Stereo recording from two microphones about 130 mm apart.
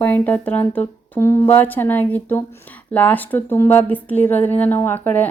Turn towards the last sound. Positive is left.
turn(degrees=15)  # may be behind; listen again after turning